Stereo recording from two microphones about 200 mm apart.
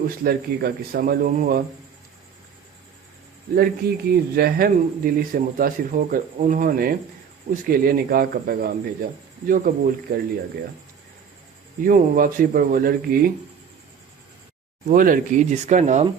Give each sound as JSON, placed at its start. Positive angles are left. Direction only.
{"t": 0.3, "sound": "speech", "side_deg": -50}
{"t": 3.5, "sound": "speech", "side_deg": -50}
{"t": 11.8, "sound": "speech", "side_deg": -40}
{"t": 14.8, "sound": "speech", "side_deg": -45}